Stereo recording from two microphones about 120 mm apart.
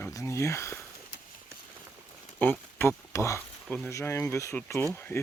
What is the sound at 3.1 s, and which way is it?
Speech, 25° left (ahead or behind).